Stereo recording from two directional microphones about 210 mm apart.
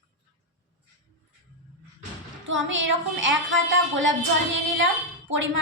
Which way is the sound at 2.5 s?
60° right (ahead or behind).